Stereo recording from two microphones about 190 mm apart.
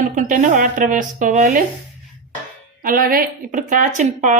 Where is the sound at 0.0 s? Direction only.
45° right (ahead or behind).